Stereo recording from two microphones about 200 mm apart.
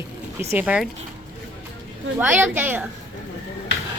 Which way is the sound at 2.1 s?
10° right (ahead or behind).